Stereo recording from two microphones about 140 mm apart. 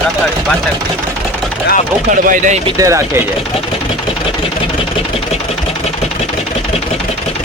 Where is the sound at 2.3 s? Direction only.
60° right (ahead or behind).